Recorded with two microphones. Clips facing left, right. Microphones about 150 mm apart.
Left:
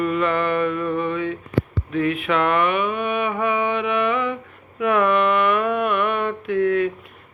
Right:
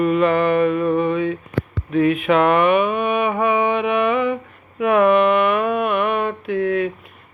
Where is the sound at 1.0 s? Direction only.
15° right (ahead or behind).